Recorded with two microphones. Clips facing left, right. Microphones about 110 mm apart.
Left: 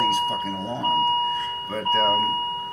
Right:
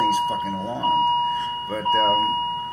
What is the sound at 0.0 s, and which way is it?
Speech, 10° right (ahead or behind).